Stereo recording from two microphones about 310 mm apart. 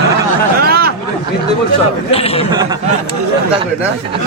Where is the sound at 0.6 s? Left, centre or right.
Right.